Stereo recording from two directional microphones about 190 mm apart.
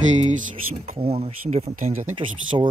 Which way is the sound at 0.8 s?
30° right (ahead or behind).